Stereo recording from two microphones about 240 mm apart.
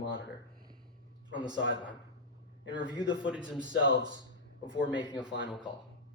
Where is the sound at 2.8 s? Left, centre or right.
Centre.